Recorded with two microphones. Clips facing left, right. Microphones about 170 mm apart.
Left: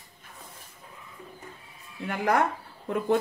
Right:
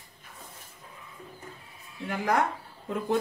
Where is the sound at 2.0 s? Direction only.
60° left (ahead or behind).